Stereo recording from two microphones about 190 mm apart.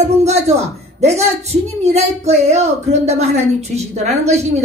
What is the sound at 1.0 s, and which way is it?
Speech, 35° right (ahead or behind).